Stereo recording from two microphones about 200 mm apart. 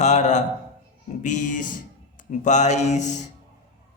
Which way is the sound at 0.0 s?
35° left (ahead or behind).